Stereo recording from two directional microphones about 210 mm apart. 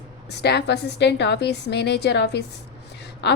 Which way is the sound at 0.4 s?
55° left (ahead or behind).